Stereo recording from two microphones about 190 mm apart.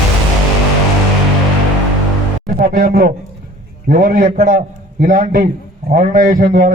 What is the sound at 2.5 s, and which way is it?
A man's voice, 50° right (ahead or behind).